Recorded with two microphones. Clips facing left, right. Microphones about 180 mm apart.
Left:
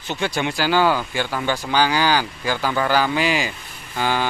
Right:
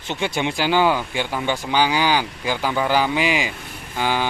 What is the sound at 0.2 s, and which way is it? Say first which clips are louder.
Speech: even; 20° right (ahead or behind).